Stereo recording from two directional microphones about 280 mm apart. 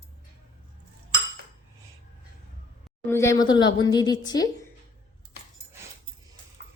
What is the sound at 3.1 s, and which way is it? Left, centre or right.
A woman's voice, centre.